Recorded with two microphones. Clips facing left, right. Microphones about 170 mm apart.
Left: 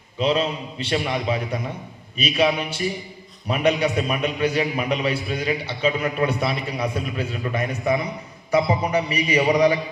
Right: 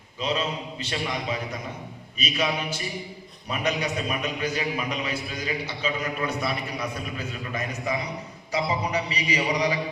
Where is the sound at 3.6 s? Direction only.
30° left (ahead or behind).